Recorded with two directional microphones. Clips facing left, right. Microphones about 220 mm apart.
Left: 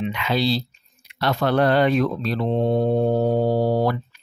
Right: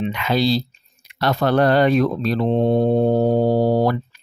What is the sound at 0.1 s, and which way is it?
Speech, 45° right (ahead or behind).